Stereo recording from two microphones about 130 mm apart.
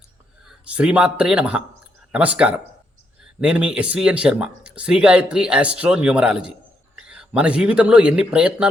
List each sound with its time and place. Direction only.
0.8 s speech: 10° right (ahead or behind)